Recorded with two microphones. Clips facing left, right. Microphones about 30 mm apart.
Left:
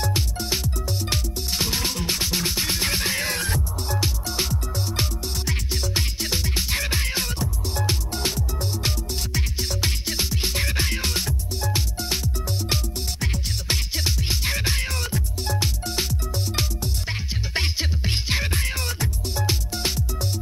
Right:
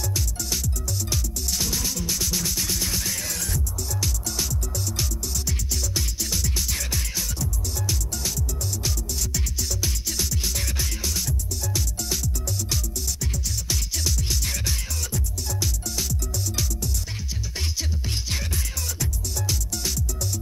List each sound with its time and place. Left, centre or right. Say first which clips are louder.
0.0 s music: left 4 dB; left